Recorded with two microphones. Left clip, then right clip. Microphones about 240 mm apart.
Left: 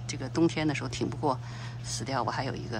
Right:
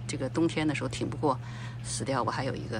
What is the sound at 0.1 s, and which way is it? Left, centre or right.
Speech, centre.